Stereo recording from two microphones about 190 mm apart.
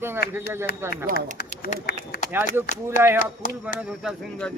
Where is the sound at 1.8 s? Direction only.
50° left (ahead or behind).